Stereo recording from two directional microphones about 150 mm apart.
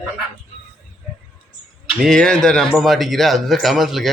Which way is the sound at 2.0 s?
5° left (ahead or behind).